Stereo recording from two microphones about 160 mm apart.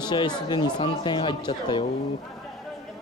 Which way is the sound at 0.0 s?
30° left (ahead or behind).